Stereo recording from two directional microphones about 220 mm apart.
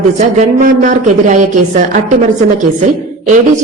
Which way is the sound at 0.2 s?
35° right (ahead or behind).